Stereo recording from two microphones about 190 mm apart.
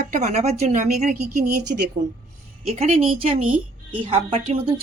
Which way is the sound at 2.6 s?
35° right (ahead or behind).